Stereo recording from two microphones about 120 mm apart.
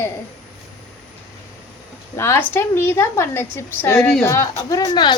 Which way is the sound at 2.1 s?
20° left (ahead or behind).